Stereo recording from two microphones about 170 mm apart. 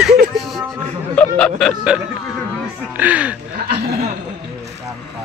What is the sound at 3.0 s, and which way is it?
Music, 10° right (ahead or behind).